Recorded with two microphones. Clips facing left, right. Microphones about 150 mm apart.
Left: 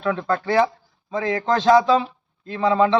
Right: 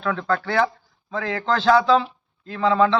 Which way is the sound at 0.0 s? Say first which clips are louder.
Left 1 dB; 20° left (ahead or behind).